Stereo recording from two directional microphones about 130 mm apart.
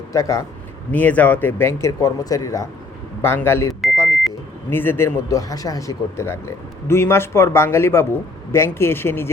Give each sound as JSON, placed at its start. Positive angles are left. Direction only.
{"t": 0.1, "sound": "speech", "side_deg": 25}
{"t": 0.9, "sound": "speech", "side_deg": 10}
{"t": 3.9, "sound": "vehicle", "side_deg": 25}
{"t": 4.7, "sound": "speech", "side_deg": 15}